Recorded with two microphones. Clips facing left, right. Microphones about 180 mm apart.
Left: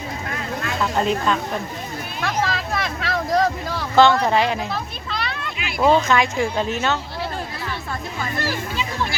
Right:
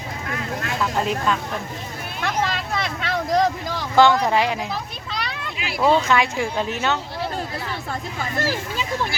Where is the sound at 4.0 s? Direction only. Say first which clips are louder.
Left 1 dB; 15° right (ahead or behind).